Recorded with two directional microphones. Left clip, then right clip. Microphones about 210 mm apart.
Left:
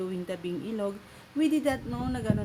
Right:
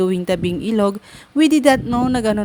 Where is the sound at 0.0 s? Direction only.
50° right (ahead or behind).